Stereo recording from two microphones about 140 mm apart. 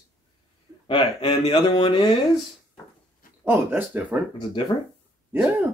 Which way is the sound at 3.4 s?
15° right (ahead or behind).